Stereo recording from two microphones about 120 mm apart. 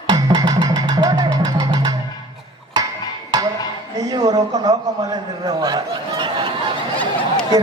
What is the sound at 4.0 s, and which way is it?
A man's voice, 30° right (ahead or behind).